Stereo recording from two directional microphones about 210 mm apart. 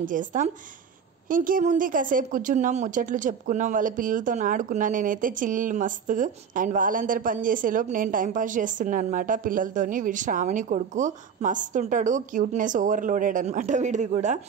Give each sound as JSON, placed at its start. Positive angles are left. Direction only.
{"t": 0.0, "sound": "a woman's voice", "side_deg": -40}